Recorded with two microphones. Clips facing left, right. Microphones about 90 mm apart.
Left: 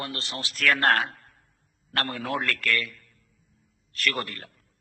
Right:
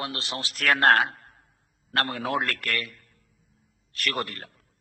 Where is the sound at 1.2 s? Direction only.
40° right (ahead or behind).